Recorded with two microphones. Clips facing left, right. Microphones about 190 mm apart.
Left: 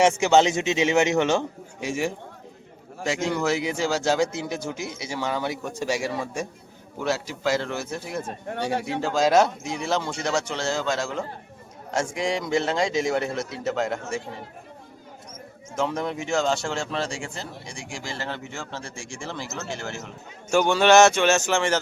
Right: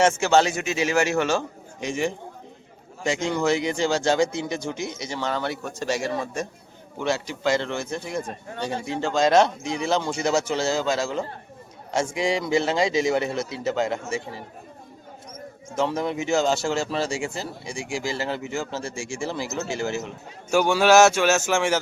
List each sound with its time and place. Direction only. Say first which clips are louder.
0.0 s a man's voice: left 1 dB; 15° left (ahead or behind)
1.8 s a man's voice: right 1 dB; 5° left (ahead or behind)
8.7 s speech: left 2 dB; 70° left (ahead or behind)
9.0 s speech: right 1 dB; 5° left (ahead or behind)
15.7 s speech: right 2 dB; centre (ahead or behind)